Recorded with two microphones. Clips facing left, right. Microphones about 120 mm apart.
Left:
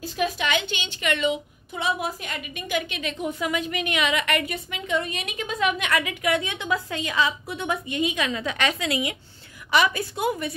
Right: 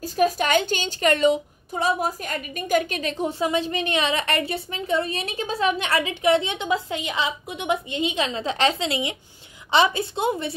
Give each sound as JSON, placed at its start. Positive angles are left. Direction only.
{"t": 0.0, "sound": "a woman's voice", "side_deg": -40}